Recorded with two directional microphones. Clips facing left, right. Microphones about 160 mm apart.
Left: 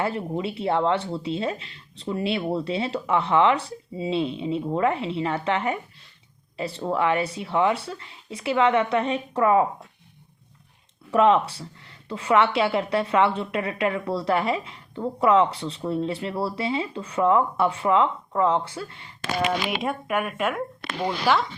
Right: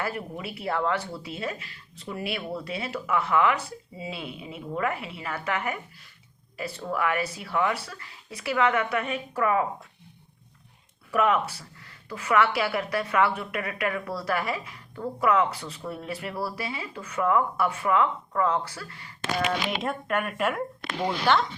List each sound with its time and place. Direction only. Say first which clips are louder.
0.0 s a woman's voice: left 6 dB; 25° left (ahead or behind)
11.1 s a woman's voice: left 5 dB; 30° left (ahead or behind)
19.8 s a woman's voice: left 2 dB; 5° left (ahead or behind)